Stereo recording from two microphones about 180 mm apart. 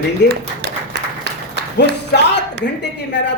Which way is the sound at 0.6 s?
65° right (ahead or behind).